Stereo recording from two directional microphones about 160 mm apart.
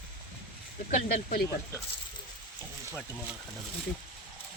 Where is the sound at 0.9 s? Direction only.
45° left (ahead or behind).